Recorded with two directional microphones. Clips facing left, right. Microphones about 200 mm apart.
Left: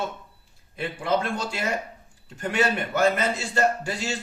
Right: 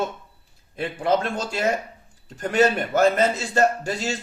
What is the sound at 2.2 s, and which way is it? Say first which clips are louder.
A man's voice: right 5 dB; 40° right (ahead or behind).